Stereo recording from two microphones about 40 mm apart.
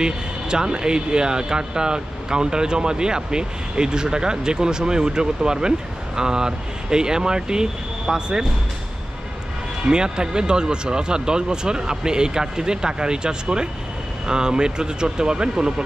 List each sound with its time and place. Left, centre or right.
0.0 s speech: centre
9.8 s speech: centre